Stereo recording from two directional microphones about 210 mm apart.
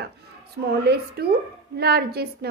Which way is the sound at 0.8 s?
50° right (ahead or behind).